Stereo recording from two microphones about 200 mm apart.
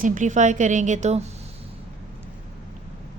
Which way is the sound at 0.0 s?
40° right (ahead or behind).